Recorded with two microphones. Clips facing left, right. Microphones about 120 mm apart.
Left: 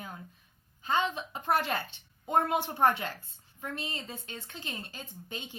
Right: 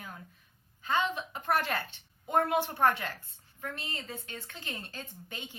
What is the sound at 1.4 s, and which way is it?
A woman's voice, 20° left (ahead or behind).